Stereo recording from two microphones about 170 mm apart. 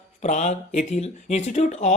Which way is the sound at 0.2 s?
45° left (ahead or behind).